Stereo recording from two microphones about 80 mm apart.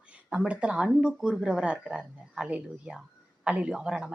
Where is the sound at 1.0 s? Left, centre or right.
Centre.